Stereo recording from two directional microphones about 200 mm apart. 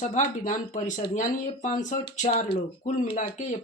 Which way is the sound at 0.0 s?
40° left (ahead or behind).